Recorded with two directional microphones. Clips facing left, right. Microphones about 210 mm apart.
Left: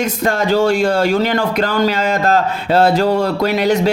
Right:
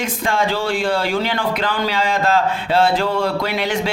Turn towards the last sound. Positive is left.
turn(degrees=40)  # may be behind; listen again after turning